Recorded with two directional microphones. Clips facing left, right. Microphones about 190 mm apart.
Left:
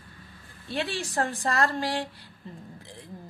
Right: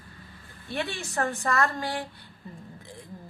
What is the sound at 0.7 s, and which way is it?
Speech, 30° left (ahead or behind).